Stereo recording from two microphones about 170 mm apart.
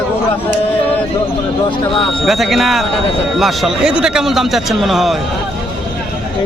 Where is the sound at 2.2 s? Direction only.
Centre (ahead or behind).